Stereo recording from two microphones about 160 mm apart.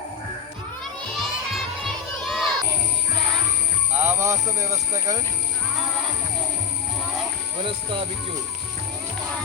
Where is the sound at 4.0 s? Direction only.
15° right (ahead or behind).